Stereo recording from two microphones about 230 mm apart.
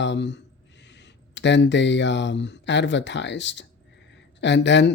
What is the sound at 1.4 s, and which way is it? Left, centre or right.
Speech, left.